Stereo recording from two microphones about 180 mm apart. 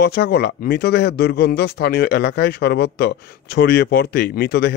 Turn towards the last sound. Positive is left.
turn(degrees=60)  # may be behind; listen again after turning